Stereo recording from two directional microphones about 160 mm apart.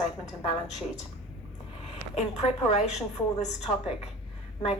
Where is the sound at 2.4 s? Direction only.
45° left (ahead or behind).